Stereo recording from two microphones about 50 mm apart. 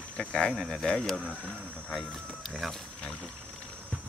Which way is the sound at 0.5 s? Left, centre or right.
Centre.